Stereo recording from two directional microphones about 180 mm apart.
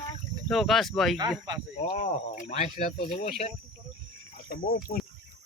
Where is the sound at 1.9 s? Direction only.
40° left (ahead or behind).